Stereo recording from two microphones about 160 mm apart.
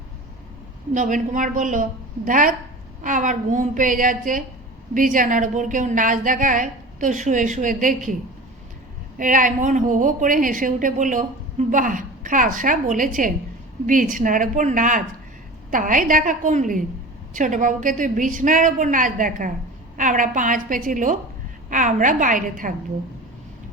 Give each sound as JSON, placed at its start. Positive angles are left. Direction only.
{"t": 0.9, "sound": "a woman's voice", "side_deg": -50}
{"t": 9.1, "sound": "a woman's voice", "side_deg": -55}